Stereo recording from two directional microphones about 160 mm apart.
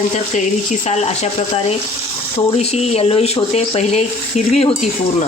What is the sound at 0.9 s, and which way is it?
Speech, 45° left (ahead or behind).